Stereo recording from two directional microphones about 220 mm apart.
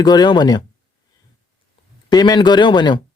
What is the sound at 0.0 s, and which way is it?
Speech, 20° left (ahead or behind).